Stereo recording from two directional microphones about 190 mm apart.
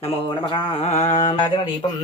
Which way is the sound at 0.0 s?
25° left (ahead or behind).